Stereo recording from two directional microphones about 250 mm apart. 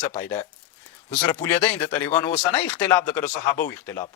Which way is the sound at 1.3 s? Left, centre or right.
Centre.